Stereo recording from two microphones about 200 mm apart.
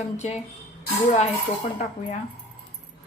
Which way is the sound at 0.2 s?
35° left (ahead or behind).